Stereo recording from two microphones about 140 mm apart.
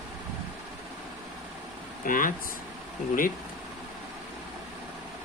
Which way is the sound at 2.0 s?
75° left (ahead or behind).